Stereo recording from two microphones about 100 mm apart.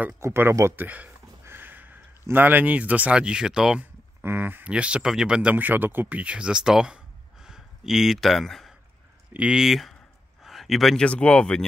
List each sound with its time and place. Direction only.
0.2 s speech: 25° right (ahead or behind); by 3.8 s 5° right (ahead or behind)
4.2 s speech: 20° right (ahead or behind); by 11.6 s 10° left (ahead or behind)